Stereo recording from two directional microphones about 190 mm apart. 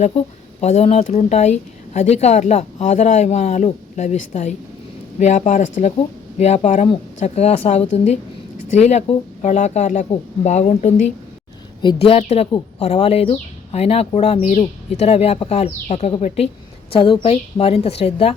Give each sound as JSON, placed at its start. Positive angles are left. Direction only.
{"t": 0.6, "sound": "speech", "side_deg": 35}
{"t": 11.8, "sound": "speech", "side_deg": 25}